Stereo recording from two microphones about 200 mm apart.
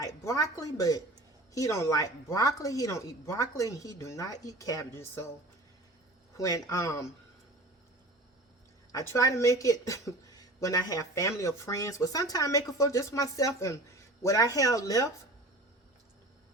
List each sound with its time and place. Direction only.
0.0 s a sound: 15° left (ahead or behind)
0.5 s speech: 15° left (ahead or behind)
6.3 s speech: 15° left (ahead or behind)
8.9 s speech: 15° left (ahead or behind)